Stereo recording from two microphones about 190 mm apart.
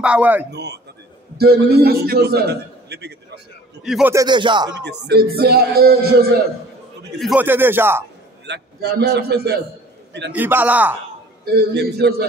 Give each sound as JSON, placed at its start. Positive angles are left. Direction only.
{"t": 0.0, "sound": "a man's voice", "side_deg": -5}
{"t": 0.5, "sound": "a man's voice", "side_deg": -60}
{"t": 3.8, "sound": "a man's voice", "side_deg": 0}
{"t": 4.1, "sound": "speech", "side_deg": -20}
{"t": 4.7, "sound": "a man's voice", "side_deg": -60}
{"t": 7.2, "sound": "a man's voice", "side_deg": -5}
{"t": 8.5, "sound": "a man's voice", "side_deg": -60}
{"t": 10.3, "sound": "a man's voice", "side_deg": -10}
{"t": 11.4, "sound": "a man's voice", "side_deg": -55}